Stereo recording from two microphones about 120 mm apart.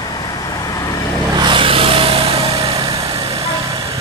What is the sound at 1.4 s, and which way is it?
Vehicle, 45° right (ahead or behind).